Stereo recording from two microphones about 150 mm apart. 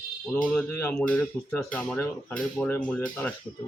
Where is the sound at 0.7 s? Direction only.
15° left (ahead or behind).